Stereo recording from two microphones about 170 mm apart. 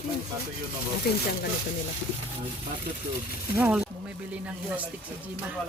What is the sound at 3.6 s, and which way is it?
Speech, 10° right (ahead or behind).